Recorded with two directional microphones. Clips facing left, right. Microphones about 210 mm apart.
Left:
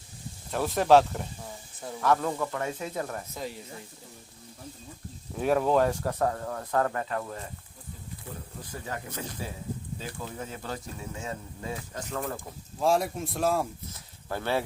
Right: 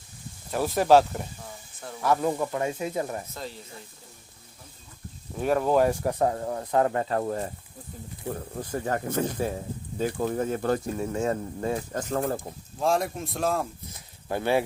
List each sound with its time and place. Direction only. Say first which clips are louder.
0.5 s a man's voice: right 1 dB; 5° right (ahead or behind)
2.0 s speech: right 2 dB; 15° right (ahead or behind)
5.4 s speech: right 1 dB; centre (ahead or behind); by 7.0 s 20° right (ahead or behind)
7.0 s speech: right 7 dB; 35° right (ahead or behind)
8.3 s speech: right 10 dB; 55° right (ahead or behind)
12.1 s speech: right 6 dB; 35° right (ahead or behind)
12.8 s a man's voice: even; 5° left (ahead or behind)
13.9 s speech: right 4 dB; 15° right (ahead or behind)